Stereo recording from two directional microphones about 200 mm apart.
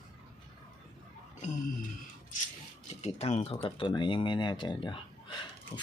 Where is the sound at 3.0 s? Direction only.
35° left (ahead or behind).